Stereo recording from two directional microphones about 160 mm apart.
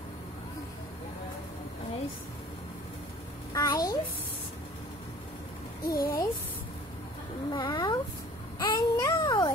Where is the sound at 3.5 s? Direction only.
25° left (ahead or behind).